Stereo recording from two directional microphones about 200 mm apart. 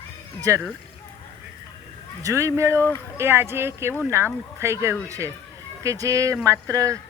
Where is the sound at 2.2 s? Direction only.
15° right (ahead or behind).